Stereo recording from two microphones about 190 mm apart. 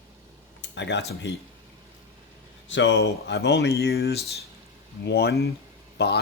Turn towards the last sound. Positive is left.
turn(degrees=60)  # may be behind; listen again after turning